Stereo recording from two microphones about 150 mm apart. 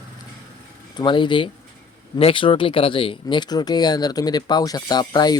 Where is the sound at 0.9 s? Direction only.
30° left (ahead or behind).